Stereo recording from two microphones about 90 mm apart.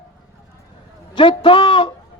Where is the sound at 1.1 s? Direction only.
65° left (ahead or behind).